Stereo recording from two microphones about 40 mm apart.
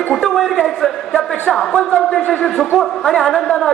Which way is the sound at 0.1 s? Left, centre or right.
Centre.